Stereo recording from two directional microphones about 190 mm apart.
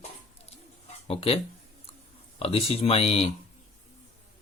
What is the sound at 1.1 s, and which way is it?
Speech, 30° left (ahead or behind).